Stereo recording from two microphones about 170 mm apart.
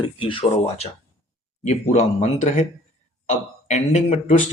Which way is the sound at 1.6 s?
40° left (ahead or behind).